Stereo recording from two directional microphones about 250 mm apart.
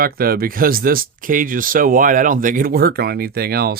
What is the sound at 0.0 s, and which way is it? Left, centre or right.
Speech, right.